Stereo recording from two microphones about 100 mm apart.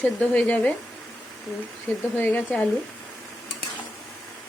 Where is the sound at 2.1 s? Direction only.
20° left (ahead or behind).